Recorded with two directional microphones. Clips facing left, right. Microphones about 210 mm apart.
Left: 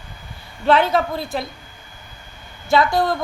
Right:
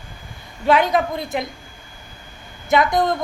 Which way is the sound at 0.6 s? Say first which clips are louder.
Even; 15° right (ahead or behind).